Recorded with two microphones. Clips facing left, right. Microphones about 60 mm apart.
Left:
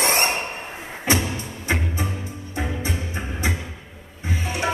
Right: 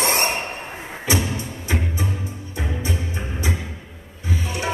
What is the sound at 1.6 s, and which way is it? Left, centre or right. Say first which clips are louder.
Music: left 1 dB; left.